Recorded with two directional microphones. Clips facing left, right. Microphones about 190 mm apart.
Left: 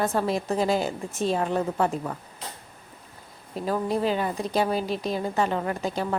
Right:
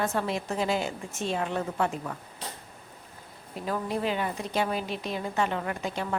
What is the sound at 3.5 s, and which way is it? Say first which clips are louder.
Speech: left 5 dB; 35° left (ahead or behind).